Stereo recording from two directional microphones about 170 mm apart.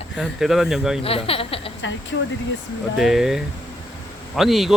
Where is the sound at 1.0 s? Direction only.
35° left (ahead or behind).